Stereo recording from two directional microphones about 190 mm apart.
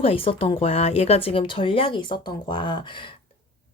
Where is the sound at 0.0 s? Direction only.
30° left (ahead or behind).